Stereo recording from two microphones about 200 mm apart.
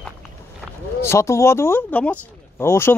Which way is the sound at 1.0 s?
15° left (ahead or behind).